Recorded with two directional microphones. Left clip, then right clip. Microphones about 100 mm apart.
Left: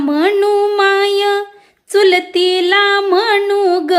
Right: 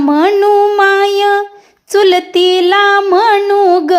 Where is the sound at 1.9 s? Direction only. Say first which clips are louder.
Right 2 dB; 35° right (ahead or behind).